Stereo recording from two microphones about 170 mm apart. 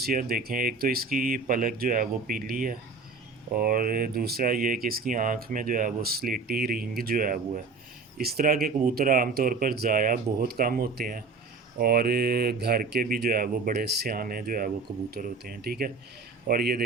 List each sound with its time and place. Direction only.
0.0 s speech: 60° right (ahead or behind)
8.2 s speech: 65° right (ahead or behind)